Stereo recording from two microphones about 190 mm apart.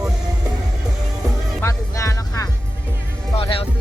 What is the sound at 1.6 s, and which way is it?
Music, 15° left (ahead or behind).